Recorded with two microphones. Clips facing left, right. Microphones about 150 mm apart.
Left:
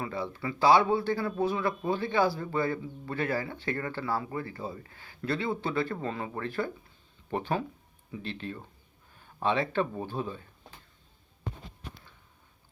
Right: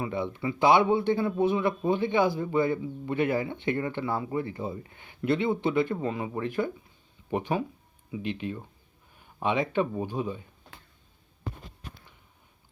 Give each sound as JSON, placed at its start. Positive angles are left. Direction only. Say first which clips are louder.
{"t": 0.0, "sound": "speech", "louder": "right 4 dB", "side_deg": -20}